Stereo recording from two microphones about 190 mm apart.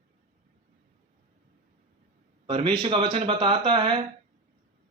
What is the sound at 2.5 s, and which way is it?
Speech, 30° right (ahead or behind).